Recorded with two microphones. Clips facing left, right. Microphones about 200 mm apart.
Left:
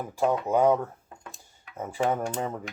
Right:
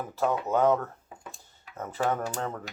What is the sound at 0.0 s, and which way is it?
Speech, 10° left (ahead or behind).